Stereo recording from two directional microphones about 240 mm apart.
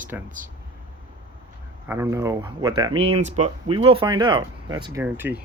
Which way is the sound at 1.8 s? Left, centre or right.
Centre.